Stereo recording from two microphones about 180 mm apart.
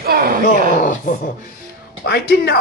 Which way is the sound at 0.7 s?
50° left (ahead or behind).